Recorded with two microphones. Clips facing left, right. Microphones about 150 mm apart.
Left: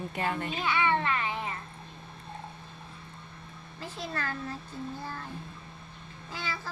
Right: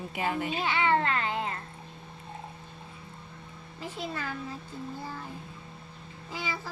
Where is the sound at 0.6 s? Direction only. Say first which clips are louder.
Right 1 dB; 50° right (ahead or behind).